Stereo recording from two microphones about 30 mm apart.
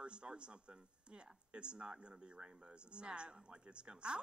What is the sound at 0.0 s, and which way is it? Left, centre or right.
Speech, right.